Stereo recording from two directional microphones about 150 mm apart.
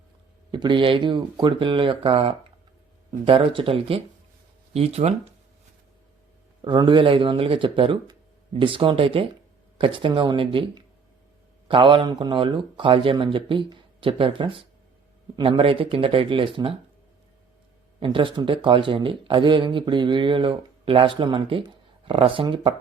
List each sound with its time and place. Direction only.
0.5 s speech: 30° right (ahead or behind)
6.6 s speech: 30° right (ahead or behind)
18.0 s speech: 35° right (ahead or behind)